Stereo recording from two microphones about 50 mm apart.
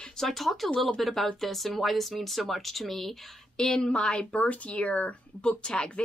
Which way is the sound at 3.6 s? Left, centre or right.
Centre.